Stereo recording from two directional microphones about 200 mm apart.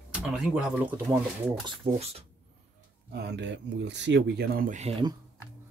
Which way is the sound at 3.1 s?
55° right (ahead or behind).